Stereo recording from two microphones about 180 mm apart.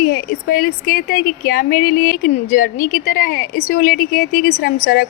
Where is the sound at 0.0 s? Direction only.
50° left (ahead or behind).